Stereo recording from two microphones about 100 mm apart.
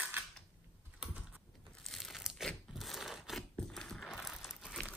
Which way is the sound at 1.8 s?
Centre (ahead or behind).